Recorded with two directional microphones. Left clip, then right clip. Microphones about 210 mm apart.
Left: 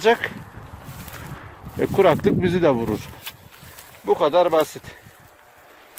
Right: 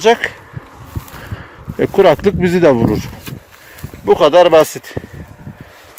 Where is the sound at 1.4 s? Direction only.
15° right (ahead or behind).